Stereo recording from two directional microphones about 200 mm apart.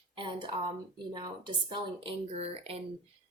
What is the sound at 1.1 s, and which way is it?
A woman's voice, 20° right (ahead or behind).